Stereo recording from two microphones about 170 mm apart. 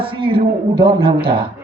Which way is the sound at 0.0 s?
30° right (ahead or behind).